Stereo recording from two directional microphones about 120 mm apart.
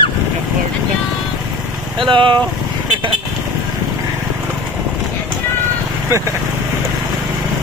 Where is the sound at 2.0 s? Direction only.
45° right (ahead or behind).